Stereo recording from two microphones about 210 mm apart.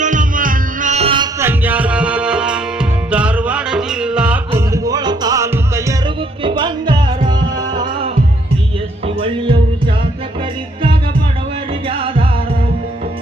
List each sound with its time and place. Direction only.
0.0 s music: 40° right (ahead or behind)
1.4 s music: 10° right (ahead or behind); by 8.2 s 25° right (ahead or behind)
9.2 s music: 25° right (ahead or behind)
11.9 s music: 25° right (ahead or behind)